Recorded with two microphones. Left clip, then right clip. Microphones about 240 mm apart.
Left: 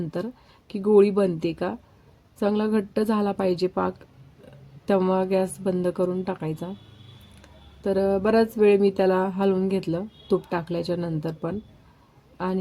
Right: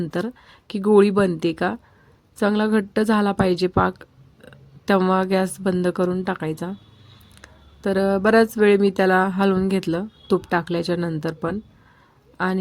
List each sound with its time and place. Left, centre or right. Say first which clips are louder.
0.7 s speech: right 2 dB; right